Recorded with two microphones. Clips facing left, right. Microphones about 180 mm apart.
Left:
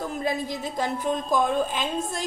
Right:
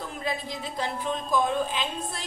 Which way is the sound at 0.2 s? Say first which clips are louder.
Left 3 dB; 45° left (ahead or behind).